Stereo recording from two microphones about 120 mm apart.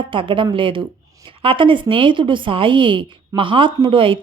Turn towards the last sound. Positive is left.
turn(degrees=-45)  # may be behind; listen again after turning